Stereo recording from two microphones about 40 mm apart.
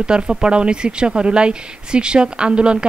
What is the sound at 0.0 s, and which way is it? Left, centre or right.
A woman's voice, right.